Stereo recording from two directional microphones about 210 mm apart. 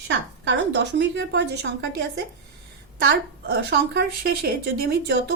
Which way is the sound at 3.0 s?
50° right (ahead or behind).